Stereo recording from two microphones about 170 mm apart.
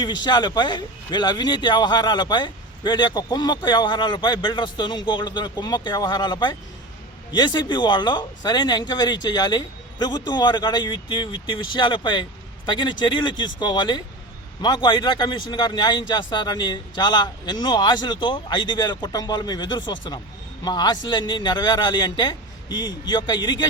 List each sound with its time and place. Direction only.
0.0 s a man's voice: 25° left (ahead or behind)